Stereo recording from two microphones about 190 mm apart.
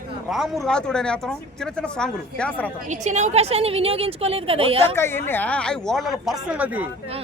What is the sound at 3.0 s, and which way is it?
A woman's voice, 40° right (ahead or behind).